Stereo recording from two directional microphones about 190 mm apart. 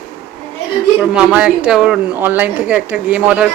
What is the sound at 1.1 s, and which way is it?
Speech, 5° right (ahead or behind).